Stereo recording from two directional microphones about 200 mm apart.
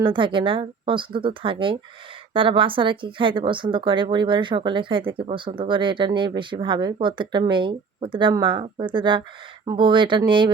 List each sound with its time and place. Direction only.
0.0 s speech: 25° right (ahead or behind)